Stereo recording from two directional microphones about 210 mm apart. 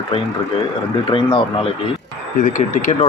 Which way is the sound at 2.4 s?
35° left (ahead or behind).